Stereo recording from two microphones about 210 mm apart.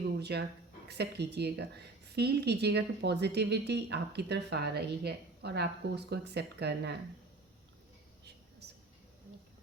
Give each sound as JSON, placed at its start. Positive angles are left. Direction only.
{"t": 0.2, "sound": "a woman's voice", "side_deg": -50}